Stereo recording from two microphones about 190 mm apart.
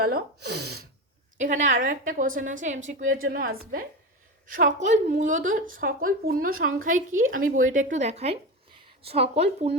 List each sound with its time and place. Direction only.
0.0 s speech: 55° right (ahead or behind)
1.4 s a woman's voice: 40° right (ahead or behind)